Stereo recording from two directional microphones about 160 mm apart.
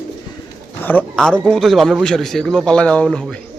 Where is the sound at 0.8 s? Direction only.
5° left (ahead or behind).